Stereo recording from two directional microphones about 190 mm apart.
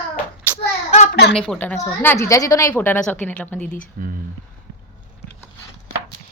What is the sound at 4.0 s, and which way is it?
Speech, 50° right (ahead or behind).